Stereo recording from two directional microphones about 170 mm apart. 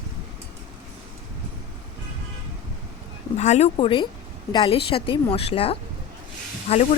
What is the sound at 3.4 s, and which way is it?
Speech, 40° left (ahead or behind).